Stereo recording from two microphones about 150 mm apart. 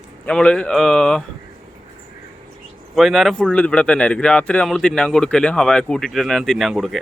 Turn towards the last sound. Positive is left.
turn(degrees=0)  # may be behind; listen again after turning